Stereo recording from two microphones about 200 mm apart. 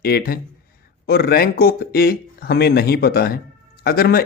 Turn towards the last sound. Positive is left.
turn(degrees=50)  # may be behind; listen again after turning